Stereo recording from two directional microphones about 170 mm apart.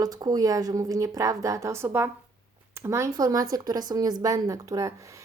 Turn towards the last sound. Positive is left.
turn(degrees=-20)  # may be behind; listen again after turning